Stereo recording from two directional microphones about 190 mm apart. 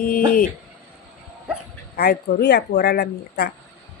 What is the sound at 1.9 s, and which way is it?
Speech, 55° left (ahead or behind).